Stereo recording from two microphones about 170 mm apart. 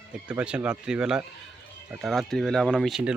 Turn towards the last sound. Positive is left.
turn(degrees=-5)  # may be behind; listen again after turning